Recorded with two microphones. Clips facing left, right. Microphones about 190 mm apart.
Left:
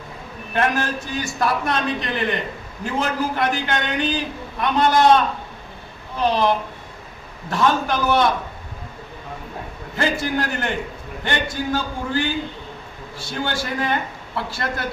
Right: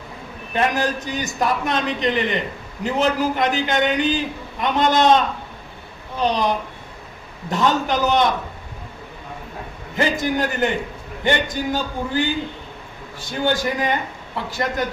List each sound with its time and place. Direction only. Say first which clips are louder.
0.5 s a man's voice: right 1 dB; 20° right (ahead or behind)
7.5 s a man's voice: even; 20° right (ahead or behind)
9.9 s a man's voice: right 2 dB; 20° right (ahead or behind)
13.1 s a man's voice: right 4 dB; 15° right (ahead or behind)